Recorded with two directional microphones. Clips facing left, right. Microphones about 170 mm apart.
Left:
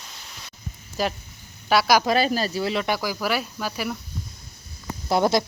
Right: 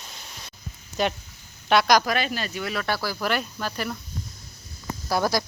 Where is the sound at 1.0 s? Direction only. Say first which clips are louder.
Right 1 dB; centre (ahead or behind).